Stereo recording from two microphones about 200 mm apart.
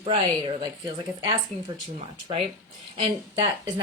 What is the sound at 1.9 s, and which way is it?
A woman's voice, 30° right (ahead or behind).